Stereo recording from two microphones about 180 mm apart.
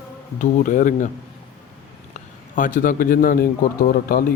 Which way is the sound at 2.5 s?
45° left (ahead or behind).